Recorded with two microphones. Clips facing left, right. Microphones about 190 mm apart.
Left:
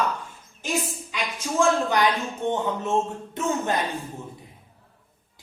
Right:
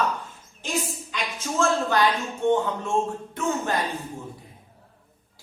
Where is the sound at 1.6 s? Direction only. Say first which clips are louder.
Left 1 dB; 15° left (ahead or behind).